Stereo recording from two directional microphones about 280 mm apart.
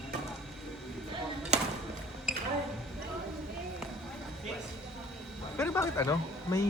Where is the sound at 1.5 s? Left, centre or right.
Right.